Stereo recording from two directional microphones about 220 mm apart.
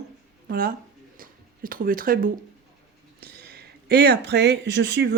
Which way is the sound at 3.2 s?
45° right (ahead or behind).